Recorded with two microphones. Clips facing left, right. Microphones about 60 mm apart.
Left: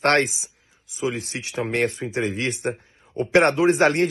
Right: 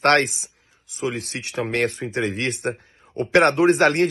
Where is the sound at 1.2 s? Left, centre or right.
Right.